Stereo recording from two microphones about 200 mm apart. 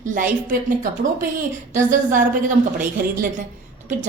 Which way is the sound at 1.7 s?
40° right (ahead or behind).